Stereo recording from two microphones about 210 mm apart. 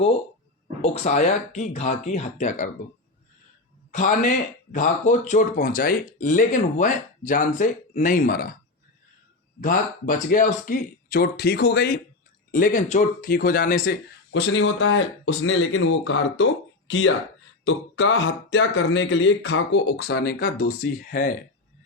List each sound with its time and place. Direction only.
0.8 s speech: 30° left (ahead or behind)
3.9 s speech: 35° left (ahead or behind)
9.6 s speech: 40° left (ahead or behind)